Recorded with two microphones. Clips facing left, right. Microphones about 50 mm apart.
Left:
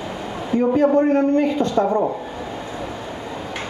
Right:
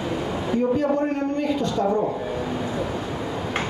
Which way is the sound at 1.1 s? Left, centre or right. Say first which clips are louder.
Left 6 dB; left.